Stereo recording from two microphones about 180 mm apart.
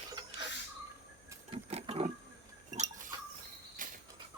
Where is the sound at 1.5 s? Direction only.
35° right (ahead or behind).